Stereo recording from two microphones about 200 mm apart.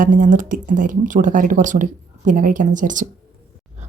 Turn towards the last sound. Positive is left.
turn(degrees=-40)  # may be behind; listen again after turning